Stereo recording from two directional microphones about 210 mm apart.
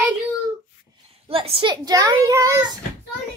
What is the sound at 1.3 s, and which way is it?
A child's voice, 25° right (ahead or behind).